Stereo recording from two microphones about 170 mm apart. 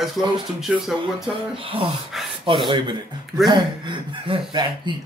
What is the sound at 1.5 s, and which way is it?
Speech, 30° right (ahead or behind).